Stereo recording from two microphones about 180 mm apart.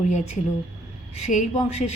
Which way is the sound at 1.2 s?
45° left (ahead or behind).